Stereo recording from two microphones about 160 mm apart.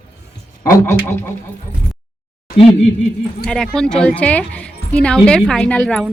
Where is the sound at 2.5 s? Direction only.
40° left (ahead or behind).